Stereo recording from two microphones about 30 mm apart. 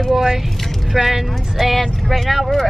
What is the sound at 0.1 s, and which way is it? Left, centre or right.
Speech, centre.